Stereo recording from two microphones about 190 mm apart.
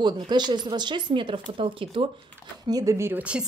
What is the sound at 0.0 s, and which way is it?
A woman's voice, 25° right (ahead or behind).